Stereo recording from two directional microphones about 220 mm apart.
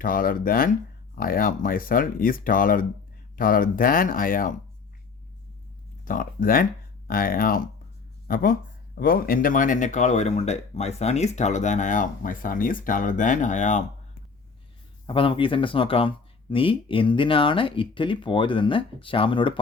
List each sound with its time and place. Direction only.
0.0 s speech: 40° left (ahead or behind)
6.1 s speech: 40° left (ahead or behind)
15.0 s speech: 25° left (ahead or behind)